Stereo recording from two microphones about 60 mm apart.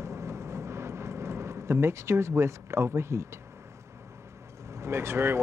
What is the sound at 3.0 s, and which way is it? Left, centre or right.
Speech, right.